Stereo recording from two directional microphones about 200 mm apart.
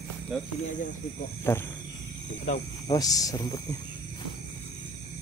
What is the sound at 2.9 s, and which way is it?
Speech, 20° left (ahead or behind).